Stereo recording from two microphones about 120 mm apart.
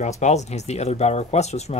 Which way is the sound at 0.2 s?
70° left (ahead or behind).